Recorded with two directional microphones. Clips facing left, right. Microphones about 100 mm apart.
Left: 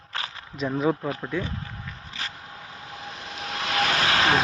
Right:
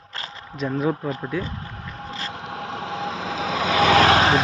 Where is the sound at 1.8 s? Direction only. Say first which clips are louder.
Right 5 dB; 80° right.